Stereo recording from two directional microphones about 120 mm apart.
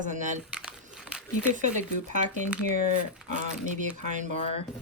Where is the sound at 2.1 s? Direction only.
90° right.